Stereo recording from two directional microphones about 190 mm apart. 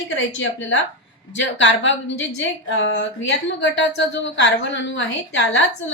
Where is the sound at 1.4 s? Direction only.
80° left.